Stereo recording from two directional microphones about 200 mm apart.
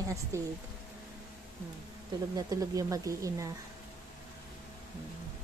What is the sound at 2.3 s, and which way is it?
Speech, 15° right (ahead or behind).